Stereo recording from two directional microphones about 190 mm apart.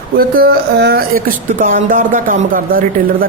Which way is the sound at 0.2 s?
50° right (ahead or behind).